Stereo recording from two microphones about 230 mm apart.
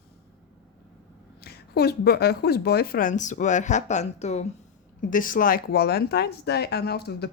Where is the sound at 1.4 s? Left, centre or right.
Left.